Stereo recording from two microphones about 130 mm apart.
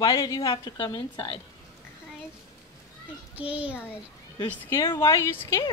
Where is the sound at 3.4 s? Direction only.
10° right (ahead or behind).